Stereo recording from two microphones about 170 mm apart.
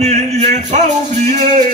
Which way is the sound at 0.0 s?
40° right (ahead or behind).